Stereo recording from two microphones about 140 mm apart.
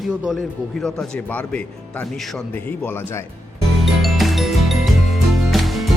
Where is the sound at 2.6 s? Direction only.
15° left (ahead or behind).